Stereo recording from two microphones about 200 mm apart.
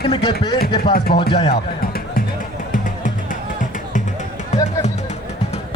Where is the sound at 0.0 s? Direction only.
25° left (ahead or behind).